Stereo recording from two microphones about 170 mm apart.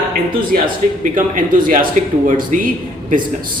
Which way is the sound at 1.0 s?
50° right (ahead or behind).